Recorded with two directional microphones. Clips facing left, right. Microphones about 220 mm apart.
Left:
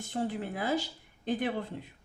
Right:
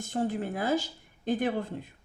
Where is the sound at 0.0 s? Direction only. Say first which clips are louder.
Right 3 dB; 45° right (ahead or behind).